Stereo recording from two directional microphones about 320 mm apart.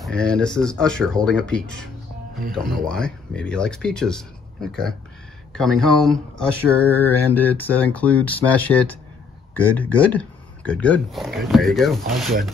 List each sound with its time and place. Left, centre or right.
0.0 s speech: centre